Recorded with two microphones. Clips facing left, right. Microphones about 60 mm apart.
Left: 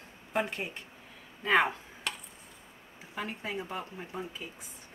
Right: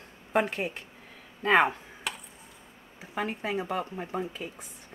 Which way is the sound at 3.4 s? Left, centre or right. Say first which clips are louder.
Right 7 dB; right.